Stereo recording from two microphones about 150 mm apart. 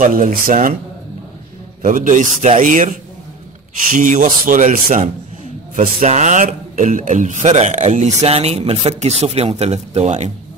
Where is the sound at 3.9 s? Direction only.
60° right (ahead or behind).